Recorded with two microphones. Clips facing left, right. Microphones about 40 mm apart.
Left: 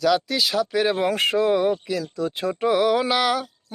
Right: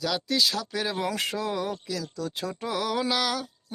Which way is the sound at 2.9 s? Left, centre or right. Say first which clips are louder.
Left 6 dB; centre.